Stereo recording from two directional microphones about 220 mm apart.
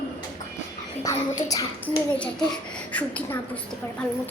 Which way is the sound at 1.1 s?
15° left (ahead or behind).